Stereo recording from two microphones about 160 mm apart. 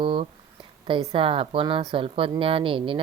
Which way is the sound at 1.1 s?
35° right (ahead or behind).